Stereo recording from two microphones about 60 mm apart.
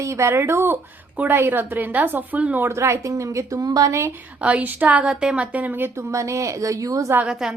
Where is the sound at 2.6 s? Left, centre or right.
Right.